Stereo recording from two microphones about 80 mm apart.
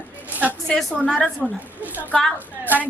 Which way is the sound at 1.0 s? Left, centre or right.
Centre.